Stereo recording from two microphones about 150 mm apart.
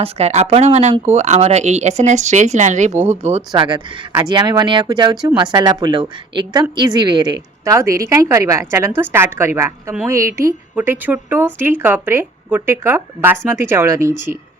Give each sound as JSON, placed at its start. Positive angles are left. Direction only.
{"t": 0.0, "sound": "speech", "side_deg": -45}
{"t": 4.3, "sound": "a woman's voice", "side_deg": -30}